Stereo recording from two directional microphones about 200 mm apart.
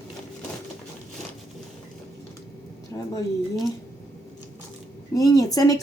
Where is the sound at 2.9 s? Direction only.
15° left (ahead or behind).